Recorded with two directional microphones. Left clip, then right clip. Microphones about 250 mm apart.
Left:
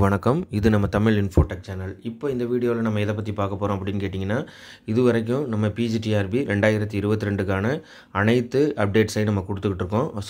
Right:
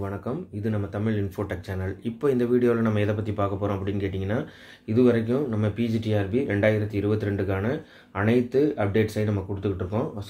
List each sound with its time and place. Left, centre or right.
0.0 s speech: left
2.2 s speech: centre; by 10.0 s left